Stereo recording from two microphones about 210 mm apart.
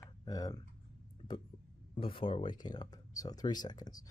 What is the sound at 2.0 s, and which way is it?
Speech, 25° left (ahead or behind).